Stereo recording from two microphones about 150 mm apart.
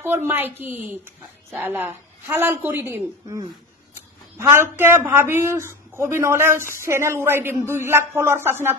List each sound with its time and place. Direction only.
0.0 s speech: 15° right (ahead or behind)